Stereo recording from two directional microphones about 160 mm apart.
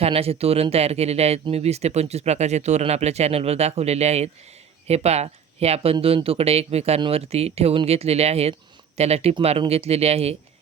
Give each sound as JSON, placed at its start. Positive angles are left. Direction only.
{"t": 0.0, "sound": "speech", "side_deg": -40}